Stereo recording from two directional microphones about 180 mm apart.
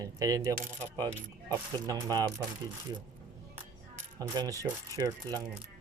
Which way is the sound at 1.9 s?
20° right (ahead or behind).